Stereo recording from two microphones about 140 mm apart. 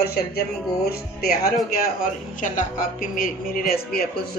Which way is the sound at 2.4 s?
70° left (ahead or behind).